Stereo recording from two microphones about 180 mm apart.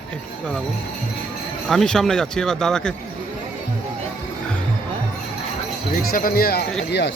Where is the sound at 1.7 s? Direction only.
5° left (ahead or behind).